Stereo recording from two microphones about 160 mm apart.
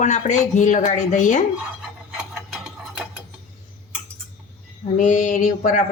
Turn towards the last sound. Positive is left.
turn(degrees=55)  # may be behind; listen again after turning